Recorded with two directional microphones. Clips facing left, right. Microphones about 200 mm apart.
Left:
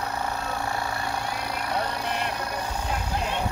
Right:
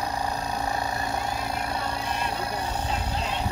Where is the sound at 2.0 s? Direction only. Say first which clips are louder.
Left 1 dB; 60° left (ahead or behind).